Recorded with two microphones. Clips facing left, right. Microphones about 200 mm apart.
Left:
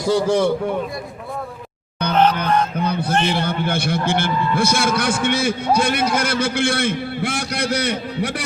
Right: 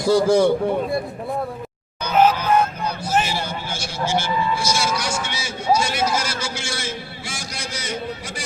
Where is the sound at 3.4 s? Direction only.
60° left (ahead or behind).